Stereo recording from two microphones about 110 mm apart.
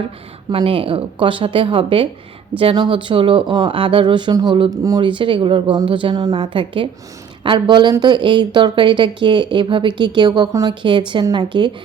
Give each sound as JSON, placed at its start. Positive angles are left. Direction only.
{"t": 0.5, "sound": "speech", "side_deg": -55}
{"t": 5.0, "sound": "speech", "side_deg": -50}
{"t": 10.8, "sound": "speech", "side_deg": -45}